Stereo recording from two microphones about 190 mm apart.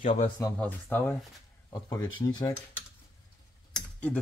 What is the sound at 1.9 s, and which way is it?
Speech, 20° left (ahead or behind).